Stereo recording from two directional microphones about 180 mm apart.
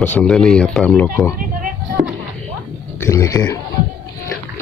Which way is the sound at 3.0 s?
15° left (ahead or behind).